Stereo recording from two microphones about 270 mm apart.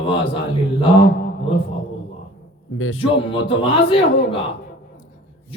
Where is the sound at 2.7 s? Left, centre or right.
Left.